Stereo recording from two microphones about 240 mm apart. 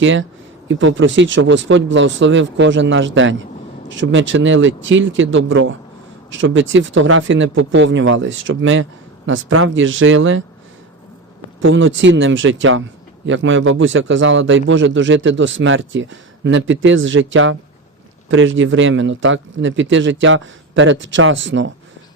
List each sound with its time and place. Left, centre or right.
0.0 s a man's voice: right
11.6 s a man's voice: right